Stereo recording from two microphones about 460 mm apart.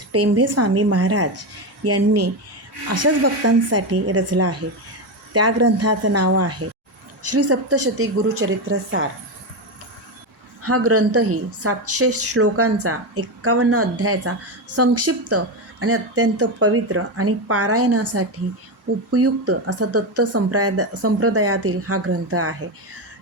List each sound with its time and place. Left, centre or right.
0.1 s a woman's voice: right
3.7 s a woman's voice: right
10.6 s a woman's voice: right